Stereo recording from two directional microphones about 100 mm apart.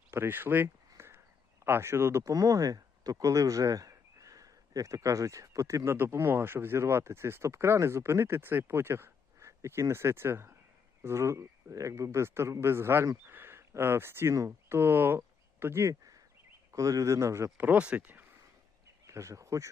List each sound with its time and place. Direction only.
0.1 s a sound: 20° right (ahead or behind)
1.6 s speech: 25° right (ahead or behind)
17.7 s speech: 15° right (ahead or behind)
19.0 s speech: 30° right (ahead or behind)